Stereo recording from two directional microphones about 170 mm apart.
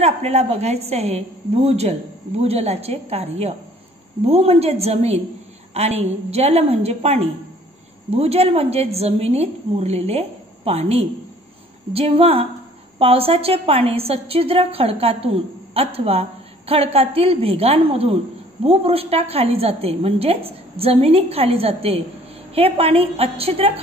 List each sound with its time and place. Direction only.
0.0 s a woman's voice: 40° right (ahead or behind)